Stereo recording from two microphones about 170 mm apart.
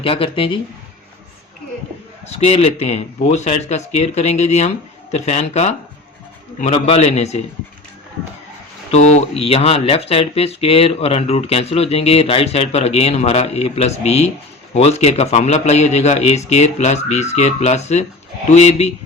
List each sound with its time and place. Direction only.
0.0 s speech: 30° left (ahead or behind)
2.3 s speech: 40° left (ahead or behind)
8.9 s speech: 40° left (ahead or behind)